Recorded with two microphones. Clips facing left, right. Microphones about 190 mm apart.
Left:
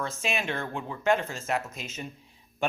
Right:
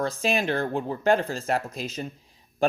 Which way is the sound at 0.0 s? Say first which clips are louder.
Right 6 dB; 35° right (ahead or behind).